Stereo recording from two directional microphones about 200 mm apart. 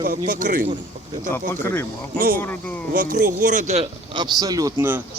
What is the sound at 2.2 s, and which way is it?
Speech, 45° right (ahead or behind).